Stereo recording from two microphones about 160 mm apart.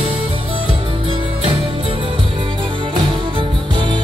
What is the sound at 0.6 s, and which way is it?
Music, 35° right (ahead or behind).